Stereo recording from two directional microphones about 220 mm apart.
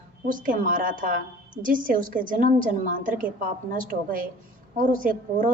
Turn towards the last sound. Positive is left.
turn(degrees=-40)  # may be behind; listen again after turning